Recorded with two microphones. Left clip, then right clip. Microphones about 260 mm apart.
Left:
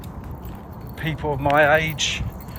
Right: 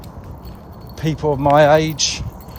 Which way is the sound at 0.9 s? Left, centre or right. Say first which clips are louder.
Right 5 dB; right.